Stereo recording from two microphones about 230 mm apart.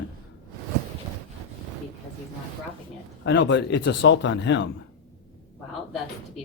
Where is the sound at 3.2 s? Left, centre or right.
Left.